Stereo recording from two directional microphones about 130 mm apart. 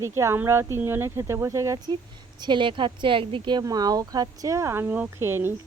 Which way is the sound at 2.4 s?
35° right (ahead or behind).